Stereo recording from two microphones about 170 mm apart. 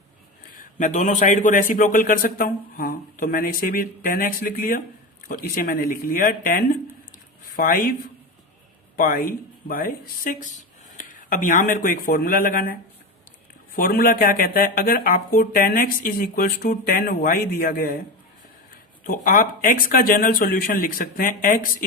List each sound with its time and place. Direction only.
0.5 s speech: 50° left (ahead or behind)
9.0 s speech: 55° left (ahead or behind)
13.7 s speech: 60° left (ahead or behind)
19.0 s speech: 55° left (ahead or behind)